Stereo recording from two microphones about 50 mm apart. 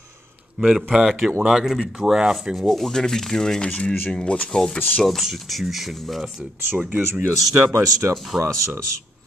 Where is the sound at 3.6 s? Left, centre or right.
Left.